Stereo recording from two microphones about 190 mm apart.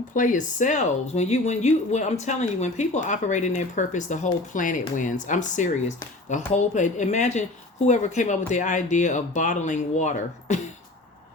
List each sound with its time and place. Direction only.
0.1 s speech: 45° left (ahead or behind)